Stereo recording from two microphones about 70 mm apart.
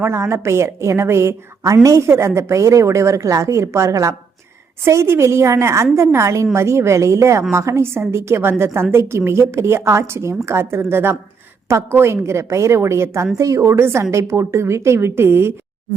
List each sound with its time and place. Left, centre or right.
0.0 s a woman's voice: right
2.0 s a woman's voice: right